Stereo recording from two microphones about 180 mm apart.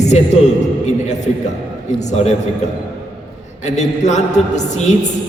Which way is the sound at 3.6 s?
40° left (ahead or behind).